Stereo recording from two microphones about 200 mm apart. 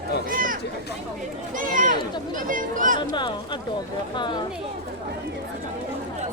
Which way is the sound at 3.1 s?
25° left (ahead or behind).